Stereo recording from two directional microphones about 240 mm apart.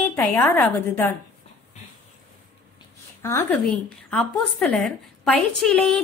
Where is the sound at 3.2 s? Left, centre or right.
Centre.